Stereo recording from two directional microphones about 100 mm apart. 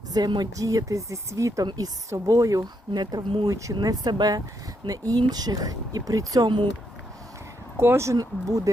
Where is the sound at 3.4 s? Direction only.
30° right (ahead or behind); by 6.7 s 50° right (ahead or behind).